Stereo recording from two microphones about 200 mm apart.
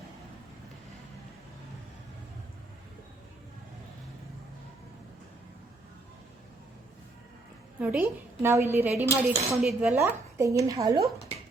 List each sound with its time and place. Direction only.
7.8 s a woman's voice: 10° right (ahead or behind)
9.0 s cutlery: 30° right (ahead or behind)
9.5 s a woman's voice: centre (ahead or behind)